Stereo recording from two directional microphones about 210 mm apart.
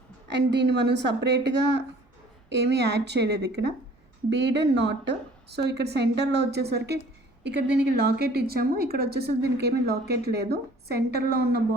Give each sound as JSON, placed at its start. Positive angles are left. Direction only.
{"t": 0.3, "sound": "a woman's voice", "side_deg": -55}